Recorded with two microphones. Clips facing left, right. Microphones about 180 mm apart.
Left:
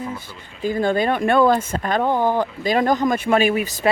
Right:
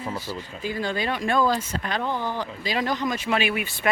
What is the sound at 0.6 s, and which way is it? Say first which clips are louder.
Speech: left 9 dB; 50° left (ahead or behind).